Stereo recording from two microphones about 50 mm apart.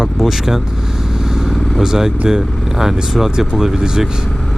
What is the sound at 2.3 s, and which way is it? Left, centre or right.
Speech, centre.